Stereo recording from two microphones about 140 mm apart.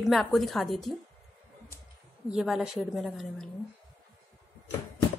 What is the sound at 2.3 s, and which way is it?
A woman's voice, 5° right (ahead or behind).